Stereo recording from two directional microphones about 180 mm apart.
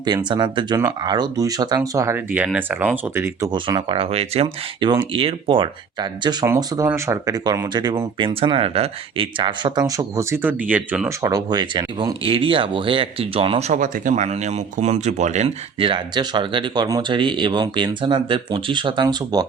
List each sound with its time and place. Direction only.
0.0 s speech: 25° right (ahead or behind)
3.5 s speech: 25° right (ahead or behind); by 11.3 s 10° right (ahead or behind)
11.3 s speech: 20° right (ahead or behind)